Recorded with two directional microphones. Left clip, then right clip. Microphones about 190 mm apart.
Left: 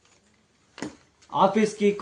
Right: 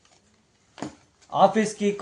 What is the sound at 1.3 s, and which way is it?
Speech, 45° right (ahead or behind).